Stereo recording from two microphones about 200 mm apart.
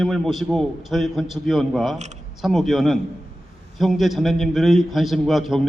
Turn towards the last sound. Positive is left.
turn(degrees=0)  # may be behind; listen again after turning